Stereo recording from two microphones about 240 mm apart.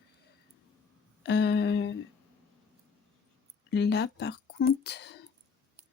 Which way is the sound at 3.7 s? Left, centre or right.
Left.